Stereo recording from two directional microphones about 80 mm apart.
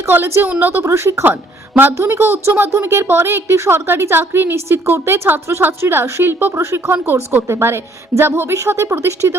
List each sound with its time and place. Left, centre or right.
0.1 s a woman's voice: right